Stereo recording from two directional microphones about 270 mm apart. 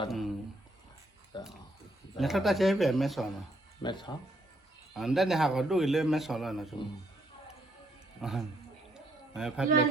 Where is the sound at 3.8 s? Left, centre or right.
Centre.